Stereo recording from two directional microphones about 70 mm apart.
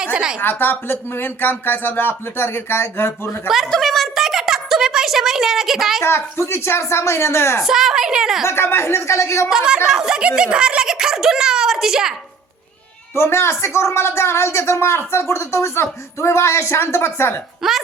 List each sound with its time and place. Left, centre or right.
0.0 s a woman's voice: centre
0.3 s a man's voice: left
3.7 s a sound: centre
6.0 s a man's voice: left
7.6 s a woman's voice: centre
8.4 s a man's voice: left
9.6 s a child's voice: centre
13.1 s a man's voice: left
17.6 s a child's voice: centre